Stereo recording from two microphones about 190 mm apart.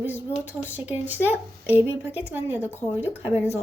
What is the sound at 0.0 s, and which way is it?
Speech, 10° right (ahead or behind).